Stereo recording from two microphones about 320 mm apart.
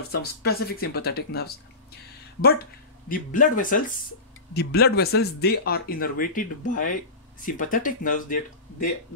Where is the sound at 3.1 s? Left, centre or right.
Left.